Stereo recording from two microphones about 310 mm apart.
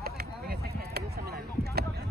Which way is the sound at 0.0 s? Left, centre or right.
Right.